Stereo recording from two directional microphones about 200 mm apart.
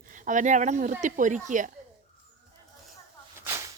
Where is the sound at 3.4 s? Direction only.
15° right (ahead or behind).